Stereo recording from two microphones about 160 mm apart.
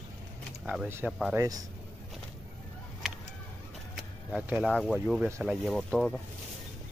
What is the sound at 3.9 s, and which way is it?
Vehicle, centre (ahead or behind).